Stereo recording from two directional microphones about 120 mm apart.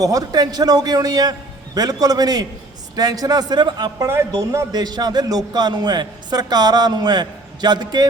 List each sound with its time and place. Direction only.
0.0 s a man's voice: 30° right (ahead or behind)
4.0 s a man's voice: 25° right (ahead or behind)